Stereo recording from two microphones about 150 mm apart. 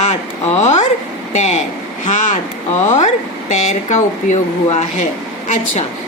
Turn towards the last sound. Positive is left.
turn(degrees=55)  # may be behind; listen again after turning